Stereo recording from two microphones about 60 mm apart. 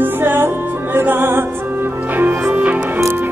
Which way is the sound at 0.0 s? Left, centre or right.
Right.